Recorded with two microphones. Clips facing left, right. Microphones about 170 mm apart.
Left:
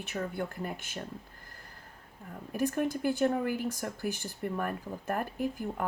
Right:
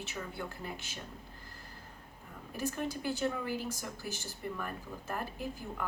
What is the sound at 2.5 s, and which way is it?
A woman's voice, 55° left (ahead or behind).